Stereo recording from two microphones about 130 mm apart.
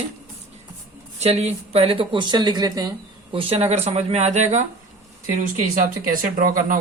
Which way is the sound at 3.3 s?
45° right (ahead or behind).